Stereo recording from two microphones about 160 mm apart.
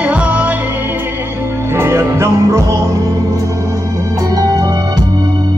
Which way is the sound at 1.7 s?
15° right (ahead or behind).